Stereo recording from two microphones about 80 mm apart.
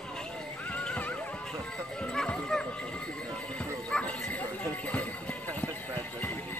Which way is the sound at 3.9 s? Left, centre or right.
Centre.